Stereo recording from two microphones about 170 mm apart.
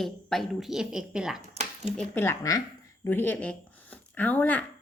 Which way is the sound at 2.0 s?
10° left (ahead or behind).